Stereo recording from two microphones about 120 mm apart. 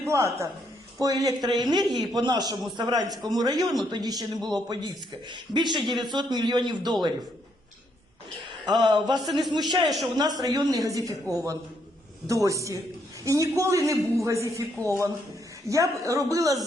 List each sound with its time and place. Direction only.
0.0 s a woman's voice: 25° right (ahead or behind)
8.6 s a man's voice: 40° right (ahead or behind)
9.8 s a man's voice: centre (ahead or behind)
10.2 s a woman's voice: 35° right (ahead or behind)